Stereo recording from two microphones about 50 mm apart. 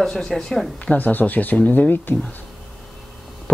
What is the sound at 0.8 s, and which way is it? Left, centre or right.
Speech, left.